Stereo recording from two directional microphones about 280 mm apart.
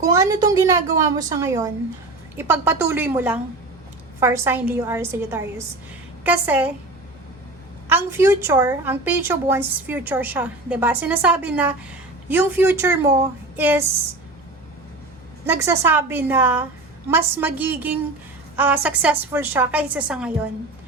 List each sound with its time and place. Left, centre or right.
0.0 s a woman's voice: centre
7.9 s a woman's voice: centre
15.4 s a woman's voice: centre